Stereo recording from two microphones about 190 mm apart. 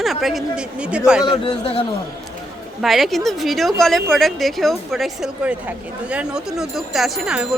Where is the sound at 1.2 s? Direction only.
25° left (ahead or behind).